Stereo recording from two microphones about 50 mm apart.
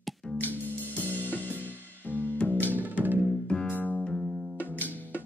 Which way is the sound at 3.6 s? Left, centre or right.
Left.